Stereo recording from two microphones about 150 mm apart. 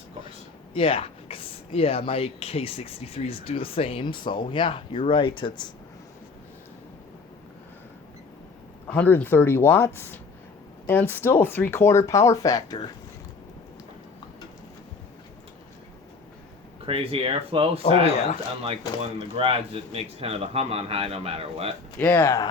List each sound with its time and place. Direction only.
0.7 s speech: 40° left (ahead or behind)
8.9 s speech: 10° left (ahead or behind); by 12.9 s 25° left (ahead or behind)
16.8 s a man's voice: 40° right (ahead or behind)
17.8 s speech: 45° left (ahead or behind)
19.4 s a man's voice: 40° right (ahead or behind)
21.9 s speech: 15° left (ahead or behind)